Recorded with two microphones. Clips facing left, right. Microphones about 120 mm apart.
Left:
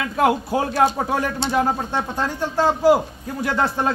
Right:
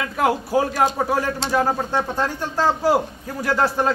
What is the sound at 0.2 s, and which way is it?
A man's voice, 25° left (ahead or behind).